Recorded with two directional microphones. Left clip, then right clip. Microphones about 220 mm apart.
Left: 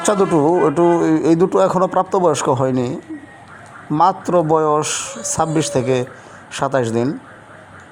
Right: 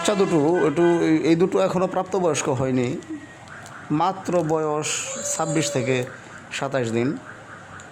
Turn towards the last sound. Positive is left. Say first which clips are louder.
# left 6 dB
turn(degrees=15)  # may be behind; listen again after turning